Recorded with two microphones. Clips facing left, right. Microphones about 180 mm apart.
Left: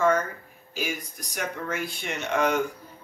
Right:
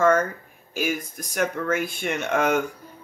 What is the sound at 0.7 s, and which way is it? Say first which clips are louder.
Speech: right 5 dB; 50° right (ahead or behind).